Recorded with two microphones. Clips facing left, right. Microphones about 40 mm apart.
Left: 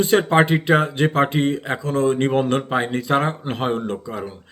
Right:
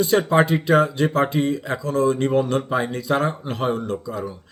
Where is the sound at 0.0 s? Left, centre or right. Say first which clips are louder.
Left 1 dB; left.